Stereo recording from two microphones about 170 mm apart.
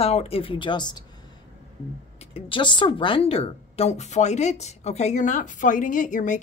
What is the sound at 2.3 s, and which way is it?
Speech, 30° left (ahead or behind).